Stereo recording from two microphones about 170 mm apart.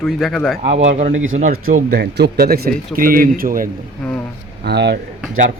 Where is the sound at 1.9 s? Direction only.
75° right (ahead or behind).